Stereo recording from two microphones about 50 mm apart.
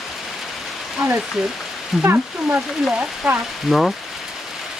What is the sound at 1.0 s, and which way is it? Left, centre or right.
Speech, centre.